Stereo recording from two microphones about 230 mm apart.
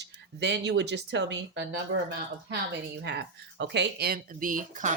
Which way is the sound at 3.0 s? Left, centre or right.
Right.